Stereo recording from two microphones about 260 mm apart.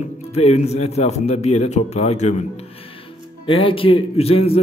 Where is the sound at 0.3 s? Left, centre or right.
Left.